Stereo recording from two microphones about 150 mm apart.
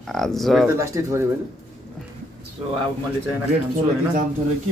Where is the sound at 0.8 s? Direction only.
20° right (ahead or behind).